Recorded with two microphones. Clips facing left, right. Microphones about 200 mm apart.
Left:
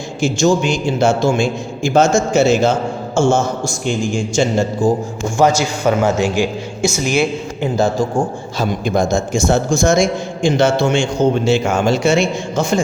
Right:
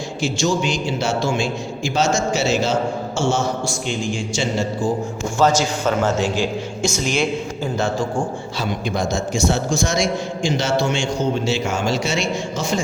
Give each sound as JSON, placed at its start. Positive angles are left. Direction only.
{"t": 0.2, "sound": "a man's voice", "side_deg": 50}
{"t": 5.4, "sound": "a man's voice", "side_deg": 10}
{"t": 7.8, "sound": "a man's voice", "side_deg": 35}